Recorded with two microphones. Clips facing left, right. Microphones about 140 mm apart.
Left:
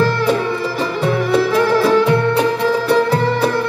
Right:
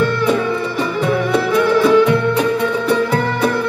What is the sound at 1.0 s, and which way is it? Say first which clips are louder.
Music: left 2 dB; 30° left (ahead or behind).